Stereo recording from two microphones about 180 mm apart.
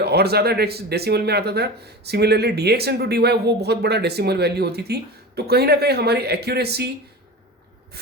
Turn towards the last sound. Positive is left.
turn(degrees=-65)  # may be behind; listen again after turning